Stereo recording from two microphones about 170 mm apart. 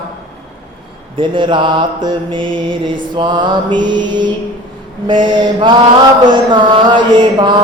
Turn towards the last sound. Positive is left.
turn(degrees=-25)  # may be behind; listen again after turning